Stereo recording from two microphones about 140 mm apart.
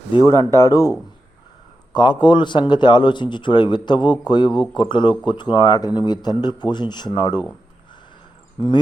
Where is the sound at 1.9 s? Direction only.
30° left (ahead or behind).